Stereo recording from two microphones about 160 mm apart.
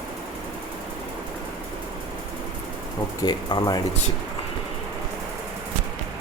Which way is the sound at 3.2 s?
25° left (ahead or behind).